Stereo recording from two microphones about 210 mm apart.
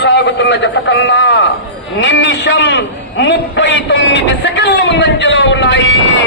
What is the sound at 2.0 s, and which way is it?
A man's voice, 60° left (ahead or behind).